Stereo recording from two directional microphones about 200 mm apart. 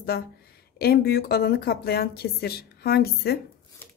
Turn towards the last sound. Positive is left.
turn(degrees=50)  # may be behind; listen again after turning